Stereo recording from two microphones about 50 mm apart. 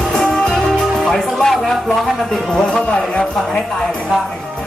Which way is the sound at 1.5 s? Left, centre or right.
Centre.